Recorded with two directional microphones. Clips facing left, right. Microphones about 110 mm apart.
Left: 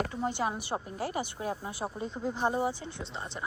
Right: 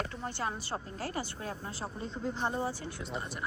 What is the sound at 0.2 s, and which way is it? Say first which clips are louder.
Speech: left 5 dB; 15° left (ahead or behind).